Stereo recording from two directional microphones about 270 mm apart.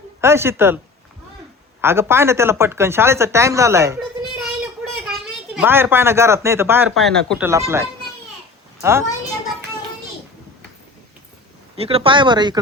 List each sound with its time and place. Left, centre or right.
0.2 s speech: centre
1.8 s speech: centre
4.4 s child singing: centre
5.5 s speech: centre
7.4 s a woman's voice: centre
11.8 s speech: right